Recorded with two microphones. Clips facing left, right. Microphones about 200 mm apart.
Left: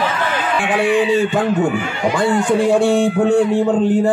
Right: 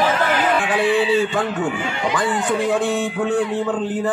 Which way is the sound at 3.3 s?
30° left (ahead or behind).